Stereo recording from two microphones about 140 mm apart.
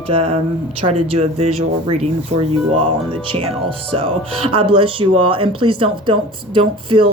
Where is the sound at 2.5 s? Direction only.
40° right (ahead or behind).